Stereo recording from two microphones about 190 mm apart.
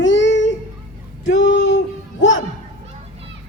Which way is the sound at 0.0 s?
75° left (ahead or behind).